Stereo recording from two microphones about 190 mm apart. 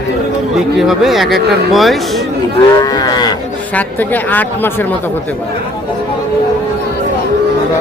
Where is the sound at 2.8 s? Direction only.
20° left (ahead or behind).